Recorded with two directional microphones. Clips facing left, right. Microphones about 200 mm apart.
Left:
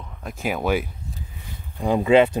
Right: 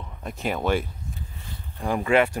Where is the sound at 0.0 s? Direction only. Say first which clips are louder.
Left 1 dB; centre (ahead or behind).